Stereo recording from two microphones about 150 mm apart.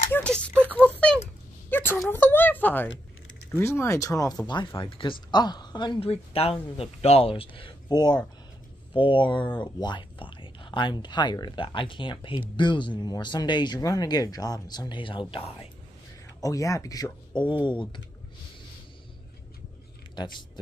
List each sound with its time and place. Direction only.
0.1 s a sound: 5° left (ahead or behind)
3.5 s speech: 15° left (ahead or behind); by 15.7 s 40° left (ahead or behind)
16.3 s speech: 20° left (ahead or behind)
20.2 s speech: 30° left (ahead or behind)